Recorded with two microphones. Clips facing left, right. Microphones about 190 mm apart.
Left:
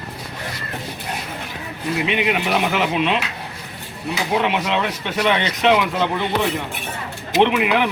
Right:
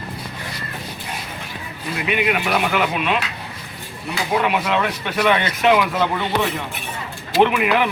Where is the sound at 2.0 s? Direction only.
25° left (ahead or behind).